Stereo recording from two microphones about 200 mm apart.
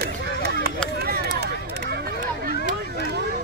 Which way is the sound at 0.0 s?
50° right (ahead or behind).